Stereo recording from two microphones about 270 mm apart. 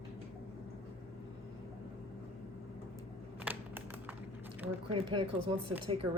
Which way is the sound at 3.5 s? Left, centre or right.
Centre.